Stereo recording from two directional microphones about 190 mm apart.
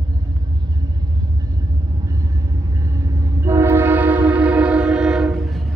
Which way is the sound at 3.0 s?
15° right (ahead or behind).